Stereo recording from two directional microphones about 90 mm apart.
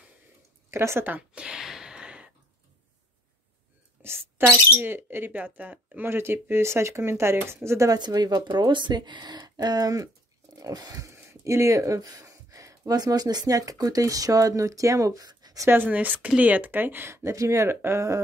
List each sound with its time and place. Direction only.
0.7 s a sound: 30° right (ahead or behind); by 2.3 s 10° right (ahead or behind)
4.0 s a woman's voice: 25° right (ahead or behind)
8.0 s speech: 50° right (ahead or behind)
15.6 s speech: 25° right (ahead or behind)